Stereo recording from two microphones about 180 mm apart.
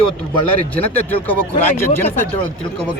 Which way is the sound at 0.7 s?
10° left (ahead or behind).